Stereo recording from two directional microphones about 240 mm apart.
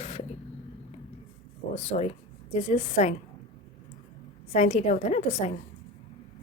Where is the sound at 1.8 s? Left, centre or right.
Left.